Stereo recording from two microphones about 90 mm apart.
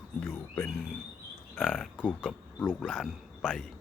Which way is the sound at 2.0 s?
15° left (ahead or behind).